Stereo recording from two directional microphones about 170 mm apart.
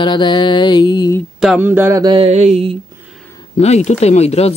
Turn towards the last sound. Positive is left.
turn(degrees=40)  # may be behind; listen again after turning